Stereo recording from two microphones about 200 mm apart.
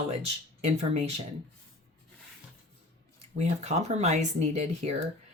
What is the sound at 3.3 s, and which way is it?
Speech, 35° right (ahead or behind).